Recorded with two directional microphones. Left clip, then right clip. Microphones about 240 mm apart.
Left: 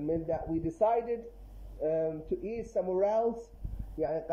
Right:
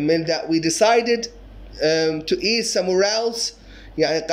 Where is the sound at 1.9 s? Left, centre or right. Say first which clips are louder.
Right 10 dB; centre.